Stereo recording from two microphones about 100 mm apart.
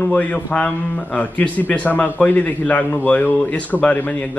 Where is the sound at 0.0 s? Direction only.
15° left (ahead or behind).